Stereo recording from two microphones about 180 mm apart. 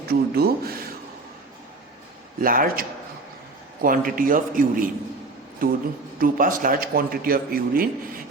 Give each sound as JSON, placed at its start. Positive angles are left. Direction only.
{"t": 0.1, "sound": "a sound", "side_deg": -60}
{"t": 2.4, "sound": "a man's voice", "side_deg": -50}
{"t": 3.8, "sound": "a man's voice", "side_deg": -50}